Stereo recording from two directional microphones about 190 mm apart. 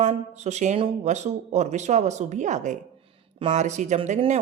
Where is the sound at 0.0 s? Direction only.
35° right (ahead or behind).